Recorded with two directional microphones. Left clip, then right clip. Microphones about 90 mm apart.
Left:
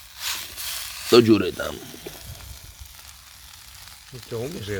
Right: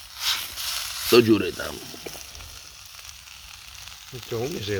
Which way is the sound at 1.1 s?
35° left (ahead or behind).